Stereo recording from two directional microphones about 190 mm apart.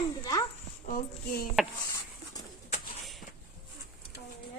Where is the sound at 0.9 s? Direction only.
45° left (ahead or behind).